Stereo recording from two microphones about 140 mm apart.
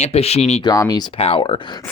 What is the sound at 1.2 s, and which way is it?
Speech, 40° left (ahead or behind).